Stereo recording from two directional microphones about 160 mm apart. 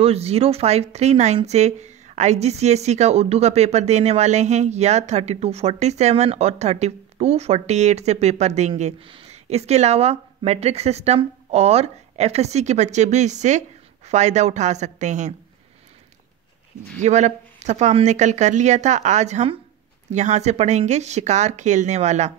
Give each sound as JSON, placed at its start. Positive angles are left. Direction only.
{"t": 0.0, "sound": "speech", "side_deg": -40}
{"t": 17.0, "sound": "speech", "side_deg": -45}